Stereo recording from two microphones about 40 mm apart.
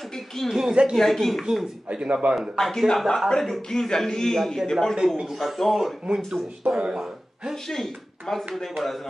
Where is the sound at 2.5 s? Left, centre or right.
Centre.